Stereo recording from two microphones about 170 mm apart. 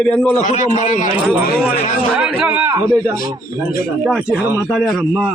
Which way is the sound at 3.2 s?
55° left (ahead or behind).